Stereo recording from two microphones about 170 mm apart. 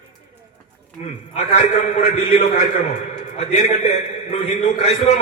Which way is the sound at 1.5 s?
40° left (ahead or behind).